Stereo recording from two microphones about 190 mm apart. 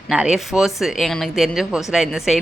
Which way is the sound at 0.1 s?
5° right (ahead or behind).